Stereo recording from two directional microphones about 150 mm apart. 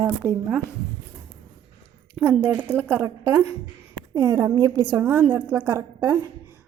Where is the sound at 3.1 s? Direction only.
25° right (ahead or behind).